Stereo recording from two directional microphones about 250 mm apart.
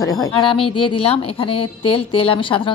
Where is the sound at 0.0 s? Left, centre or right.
Centre.